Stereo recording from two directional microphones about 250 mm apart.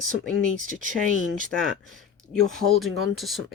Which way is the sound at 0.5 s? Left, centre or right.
Right.